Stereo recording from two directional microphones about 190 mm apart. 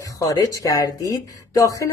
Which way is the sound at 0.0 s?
15° left (ahead or behind).